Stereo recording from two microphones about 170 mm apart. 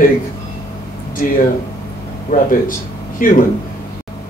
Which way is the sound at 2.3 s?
50° left (ahead or behind).